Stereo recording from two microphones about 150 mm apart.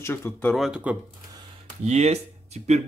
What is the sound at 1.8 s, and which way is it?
Speech, 45° right (ahead or behind).